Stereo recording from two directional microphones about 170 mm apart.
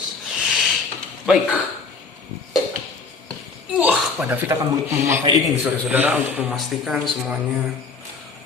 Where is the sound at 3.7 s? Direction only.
5° right (ahead or behind).